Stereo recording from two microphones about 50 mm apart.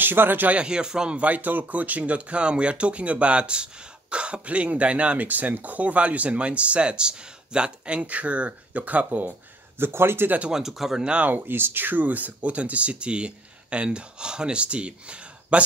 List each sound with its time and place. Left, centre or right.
0.0 s a man's voice: right
0.5 s speech: right
1.2 s speech: right
9.8 s a man's voice: right
10.5 s speech: centre
11.2 s speech: right